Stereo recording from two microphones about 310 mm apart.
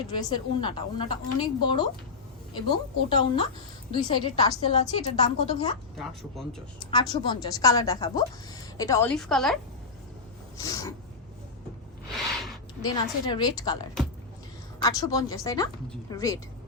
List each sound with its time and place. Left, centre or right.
0.1 s a woman's voice: centre
6.0 s a woman's voice: centre
6.9 s a woman's voice: centre
10.6 s snort: centre
12.1 s a sound: centre
12.8 s a woman's voice: centre
14.8 s a woman's voice: centre